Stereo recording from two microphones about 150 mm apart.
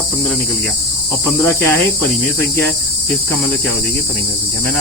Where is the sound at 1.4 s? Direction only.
15° left (ahead or behind).